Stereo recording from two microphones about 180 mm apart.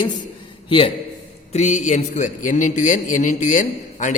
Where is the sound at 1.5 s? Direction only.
40° left (ahead or behind).